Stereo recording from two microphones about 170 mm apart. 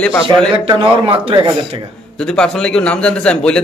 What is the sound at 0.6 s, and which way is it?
Speech, 30° right (ahead or behind).